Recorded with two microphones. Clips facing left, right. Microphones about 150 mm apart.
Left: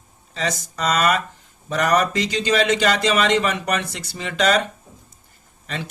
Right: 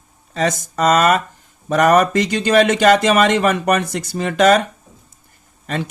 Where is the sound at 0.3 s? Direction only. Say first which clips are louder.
Right 7 dB; 50° right (ahead or behind).